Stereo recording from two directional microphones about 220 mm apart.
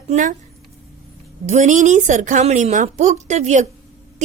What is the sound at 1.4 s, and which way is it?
A woman's voice, 35° right (ahead or behind).